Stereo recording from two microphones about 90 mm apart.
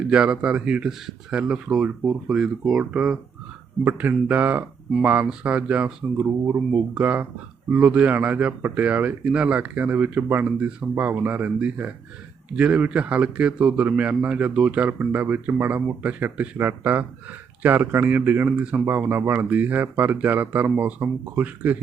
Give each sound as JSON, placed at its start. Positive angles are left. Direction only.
{"t": 0.1, "sound": "a man's voice", "side_deg": -10}
{"t": 10.4, "sound": "a man's voice", "side_deg": -10}